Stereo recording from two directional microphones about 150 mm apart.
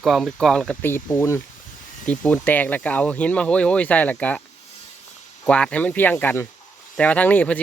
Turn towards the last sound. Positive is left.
turn(degrees=10)  # may be behind; listen again after turning